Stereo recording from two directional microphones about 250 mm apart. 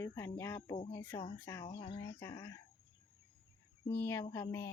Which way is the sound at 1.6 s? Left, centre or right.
Left.